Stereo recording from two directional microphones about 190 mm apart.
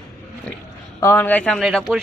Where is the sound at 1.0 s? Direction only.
15° left (ahead or behind).